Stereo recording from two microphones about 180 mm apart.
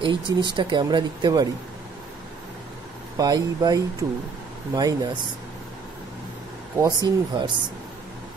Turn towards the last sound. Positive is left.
turn(degrees=-25)  # may be behind; listen again after turning